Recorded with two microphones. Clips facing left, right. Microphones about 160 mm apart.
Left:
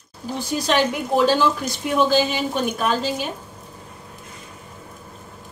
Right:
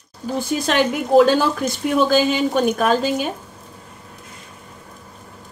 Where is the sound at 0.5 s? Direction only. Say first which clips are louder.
Even; 55° right (ahead or behind).